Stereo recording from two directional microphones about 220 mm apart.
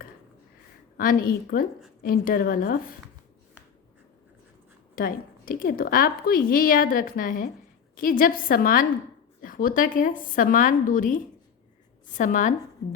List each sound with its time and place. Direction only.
0.9 s a woman's voice: 40° left (ahead or behind)
4.9 s a woman's voice: 40° left (ahead or behind)